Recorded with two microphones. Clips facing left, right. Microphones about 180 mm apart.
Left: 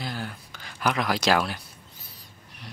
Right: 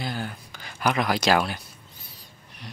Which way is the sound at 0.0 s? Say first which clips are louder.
Right 2 dB; centre (ahead or behind).